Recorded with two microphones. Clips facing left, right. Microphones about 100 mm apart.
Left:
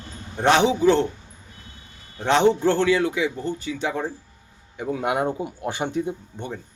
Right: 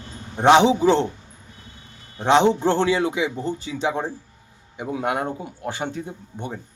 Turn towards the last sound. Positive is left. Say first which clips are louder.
# left 1 dB
turn(degrees=15)  # may be behind; listen again after turning